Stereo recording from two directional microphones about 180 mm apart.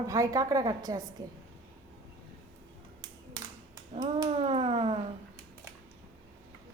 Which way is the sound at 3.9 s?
25° right (ahead or behind).